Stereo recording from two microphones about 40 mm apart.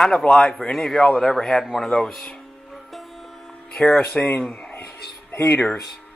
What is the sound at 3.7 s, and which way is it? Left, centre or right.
Speech, left.